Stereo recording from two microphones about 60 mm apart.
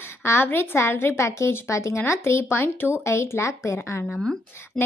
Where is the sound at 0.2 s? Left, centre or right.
Left.